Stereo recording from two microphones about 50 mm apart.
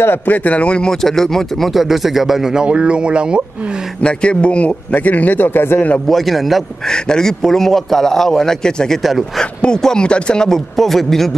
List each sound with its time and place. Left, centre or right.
0.0 s speech: left
1.0 s speech: centre
2.6 s speech: right
4.0 s a man's voice: left
6.0 s speech: centre
6.9 s a man's voice: centre
10.0 s a man's voice: centre